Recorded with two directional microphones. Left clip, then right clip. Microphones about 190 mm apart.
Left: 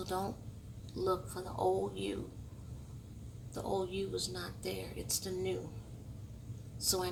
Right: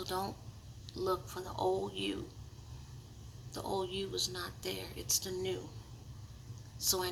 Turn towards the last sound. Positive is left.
turn(degrees=15)  # may be behind; listen again after turning